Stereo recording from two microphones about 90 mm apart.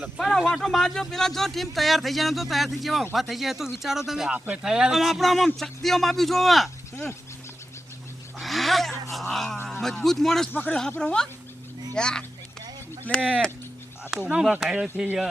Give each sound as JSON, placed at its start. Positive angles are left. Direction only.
{"t": 0.2, "sound": "speech", "side_deg": 5}
{"t": 8.4, "sound": "a sound", "side_deg": 0}
{"t": 9.3, "sound": "speech", "side_deg": 5}
{"t": 13.1, "sound": "speech", "side_deg": -15}